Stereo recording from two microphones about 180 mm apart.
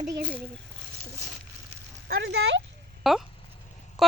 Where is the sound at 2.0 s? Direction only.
75° right (ahead or behind).